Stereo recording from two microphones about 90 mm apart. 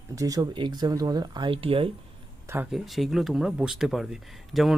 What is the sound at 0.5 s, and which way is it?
Speech, 55° right (ahead or behind).